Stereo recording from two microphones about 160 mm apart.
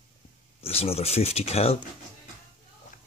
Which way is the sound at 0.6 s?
40° left (ahead or behind).